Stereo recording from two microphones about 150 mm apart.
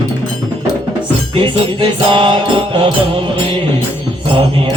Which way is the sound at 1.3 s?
35° right (ahead or behind).